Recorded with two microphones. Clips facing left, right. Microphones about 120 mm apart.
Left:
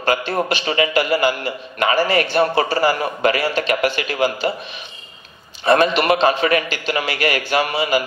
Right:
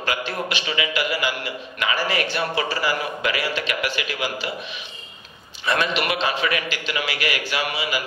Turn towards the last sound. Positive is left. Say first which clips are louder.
# left 7 dB
turn(degrees=45)  # may be behind; listen again after turning